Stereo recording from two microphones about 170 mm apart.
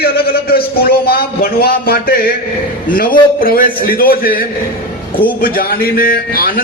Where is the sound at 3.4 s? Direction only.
55° left (ahead or behind).